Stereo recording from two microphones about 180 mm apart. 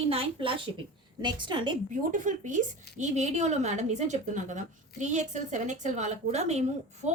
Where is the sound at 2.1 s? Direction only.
45° right (ahead or behind).